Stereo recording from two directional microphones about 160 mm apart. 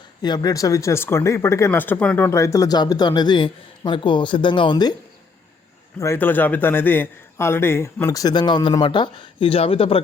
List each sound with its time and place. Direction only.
0.2 s speech: 25° left (ahead or behind)
6.0 s a man's voice: 15° left (ahead or behind); by 10.0 s 35° left (ahead or behind)